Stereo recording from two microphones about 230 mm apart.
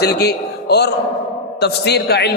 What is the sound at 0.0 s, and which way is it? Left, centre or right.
A man's voice, left.